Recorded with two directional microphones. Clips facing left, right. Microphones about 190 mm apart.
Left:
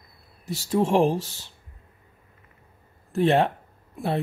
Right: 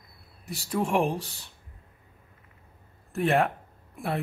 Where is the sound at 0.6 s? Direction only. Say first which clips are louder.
Left 5 dB; 25° left (ahead or behind).